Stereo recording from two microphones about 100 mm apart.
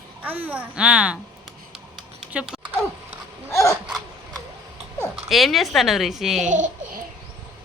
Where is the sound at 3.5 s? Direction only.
30° left (ahead or behind).